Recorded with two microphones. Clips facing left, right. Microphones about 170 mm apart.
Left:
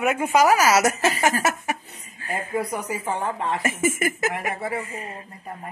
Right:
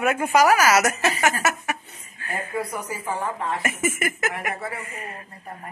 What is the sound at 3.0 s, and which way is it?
Speech, 30° left (ahead or behind).